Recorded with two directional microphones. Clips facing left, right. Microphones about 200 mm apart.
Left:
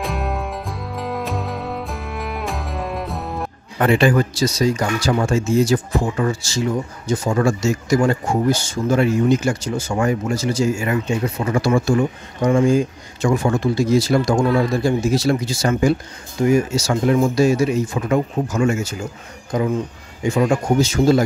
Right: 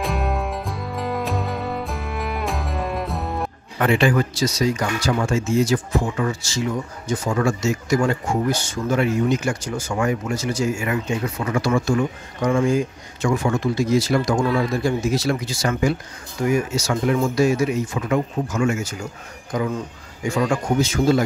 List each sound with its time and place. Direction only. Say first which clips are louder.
0.0 s music: even; centre (ahead or behind)
3.8 s speech: left 3 dB; 35° left (ahead or behind)